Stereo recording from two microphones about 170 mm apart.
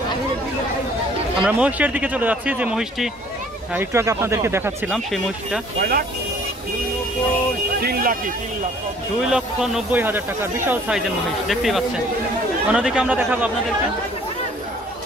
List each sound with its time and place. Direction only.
1.4 s speech: 10° right (ahead or behind)
3.7 s speech: 15° right (ahead or behind)
4.9 s a man's voice: centre (ahead or behind)
5.8 s speech: 60° right (ahead or behind)
7.8 s speech: 60° right (ahead or behind)
9.2 s speech: 5° right (ahead or behind)
11.4 s a man's voice: centre (ahead or behind)